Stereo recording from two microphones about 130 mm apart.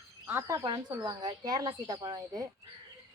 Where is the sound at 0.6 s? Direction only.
35° right (ahead or behind).